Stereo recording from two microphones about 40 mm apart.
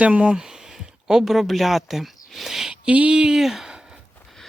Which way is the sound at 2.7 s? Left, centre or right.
Right.